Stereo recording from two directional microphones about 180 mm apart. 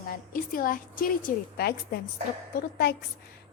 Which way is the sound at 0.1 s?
55° left (ahead or behind).